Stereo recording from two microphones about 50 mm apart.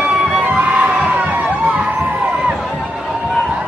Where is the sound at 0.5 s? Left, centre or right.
Right.